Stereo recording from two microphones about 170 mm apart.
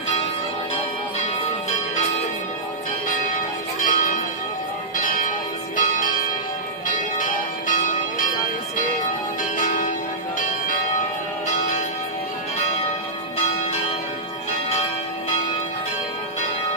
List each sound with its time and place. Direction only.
0.7 s music: 30° left (ahead or behind)
3.8 s church bell: 55° left (ahead or behind)
4.9 s music: 50° left (ahead or behind)
5.8 s church bell: 50° left (ahead or behind)
6.9 s change ringing: 50° left (ahead or behind)
9.4 s change ringing: 50° left (ahead or behind)
10.4 s church bell: 50° left (ahead or behind)